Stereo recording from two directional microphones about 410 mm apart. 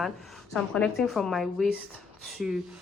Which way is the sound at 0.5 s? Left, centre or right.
Centre.